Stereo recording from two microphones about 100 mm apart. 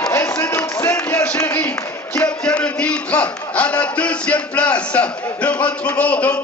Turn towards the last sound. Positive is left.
turn(degrees=15)  # may be behind; listen again after turning